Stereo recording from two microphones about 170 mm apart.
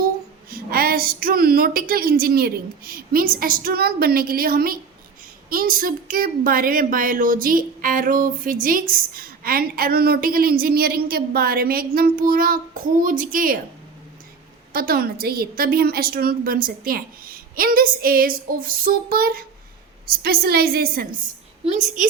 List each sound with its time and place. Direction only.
0.5 s speech: 60° right (ahead or behind)
14.7 s speech: 60° right (ahead or behind)